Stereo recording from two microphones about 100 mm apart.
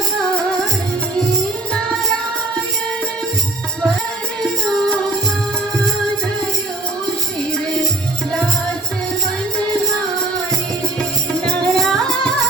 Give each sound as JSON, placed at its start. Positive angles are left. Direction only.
{"t": 4.7, "sound": "music", "side_deg": 10}
{"t": 11.4, "sound": "music", "side_deg": 5}